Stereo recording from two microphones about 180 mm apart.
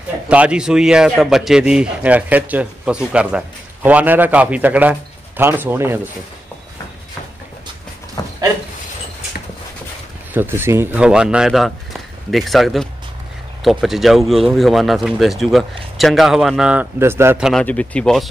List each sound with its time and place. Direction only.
0.3 s a man's voice: 5° right (ahead or behind)
8.2 s a sound: 20° left (ahead or behind)
10.3 s speech: 10° right (ahead or behind)
17.5 s speech: 5° left (ahead or behind)